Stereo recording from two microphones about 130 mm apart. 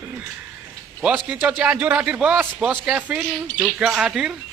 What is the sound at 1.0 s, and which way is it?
Speech, 10° right (ahead or behind).